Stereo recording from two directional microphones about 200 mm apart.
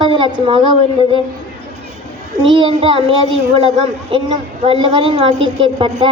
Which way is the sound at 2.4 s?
25° right (ahead or behind).